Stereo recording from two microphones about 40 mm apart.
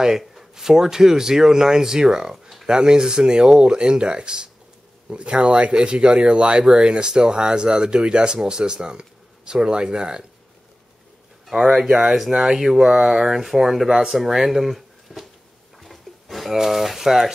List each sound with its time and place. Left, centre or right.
0.2 s speech: centre
11.5 s speech: centre
15.8 s a sound: centre
16.5 s speech: centre